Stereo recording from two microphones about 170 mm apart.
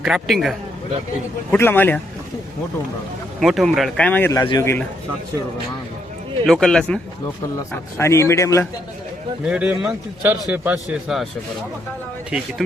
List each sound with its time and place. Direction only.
0.0 s speech: centre (ahead or behind)
1.5 s a man's voice: 10° left (ahead or behind)
3.4 s speech: centre (ahead or behind)
4.3 s speech: 20° left (ahead or behind)
6.4 s speech: centre (ahead or behind)
7.7 s a man's voice: 15° left (ahead or behind)
9.4 s speech: 5° right (ahead or behind)
12.3 s speech: 5° right (ahead or behind)